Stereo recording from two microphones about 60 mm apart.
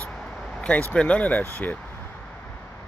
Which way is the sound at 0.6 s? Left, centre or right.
Left.